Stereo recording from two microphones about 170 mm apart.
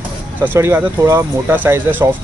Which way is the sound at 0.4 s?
15° right (ahead or behind).